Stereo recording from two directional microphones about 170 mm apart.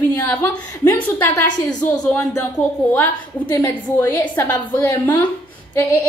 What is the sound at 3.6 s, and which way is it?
A woman's voice, 15° left (ahead or behind).